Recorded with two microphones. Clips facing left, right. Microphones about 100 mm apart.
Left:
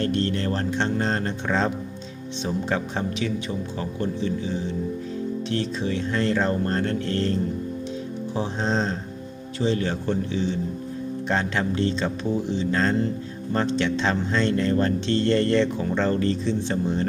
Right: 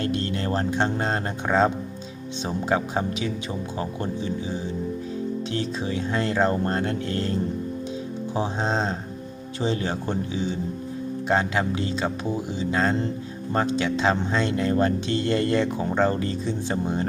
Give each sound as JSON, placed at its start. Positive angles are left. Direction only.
{"t": 0.0, "sound": "speech", "side_deg": -15}
{"t": 8.4, "sound": "speech", "side_deg": -15}